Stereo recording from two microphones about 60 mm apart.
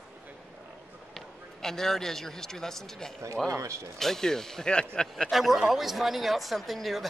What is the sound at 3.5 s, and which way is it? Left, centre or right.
Speech, right.